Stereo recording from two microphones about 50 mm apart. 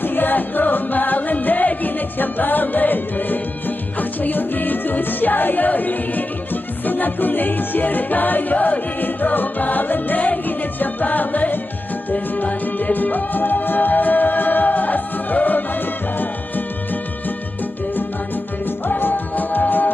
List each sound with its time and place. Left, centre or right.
0.0 s music: left
18.9 s music: left